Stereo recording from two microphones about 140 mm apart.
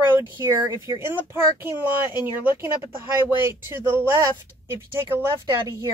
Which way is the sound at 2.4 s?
15° right (ahead or behind).